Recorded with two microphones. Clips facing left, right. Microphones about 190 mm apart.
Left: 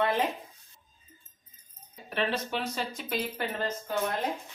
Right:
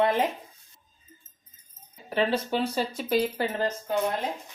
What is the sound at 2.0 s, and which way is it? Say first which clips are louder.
Speech: right 5 dB; 30° right (ahead or behind).